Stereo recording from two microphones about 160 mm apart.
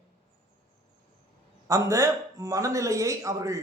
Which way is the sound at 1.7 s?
20° right (ahead or behind).